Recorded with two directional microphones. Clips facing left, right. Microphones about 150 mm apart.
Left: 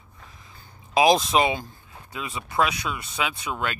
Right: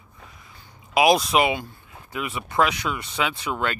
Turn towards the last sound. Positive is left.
turn(degrees=20)  # may be behind; listen again after turning